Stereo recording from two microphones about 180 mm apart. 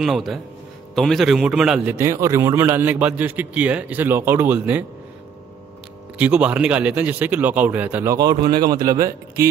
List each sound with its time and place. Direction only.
0.0 s a man's voice: centre (ahead or behind)
2.0 s a man's voice: 15° right (ahead or behind)
6.1 s a man's voice: 5° right (ahead or behind)